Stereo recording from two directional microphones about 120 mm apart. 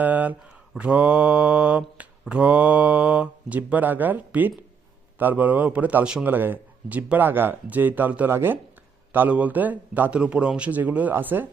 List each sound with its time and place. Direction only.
0.0 s speech: 15° right (ahead or behind)
0.7 s mantra: 10° right (ahead or behind)